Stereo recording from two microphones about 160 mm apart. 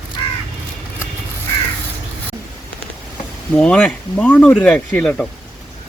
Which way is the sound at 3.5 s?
5° left (ahead or behind).